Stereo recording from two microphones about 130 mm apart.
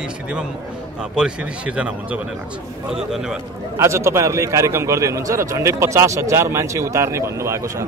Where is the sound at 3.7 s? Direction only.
20° right (ahead or behind).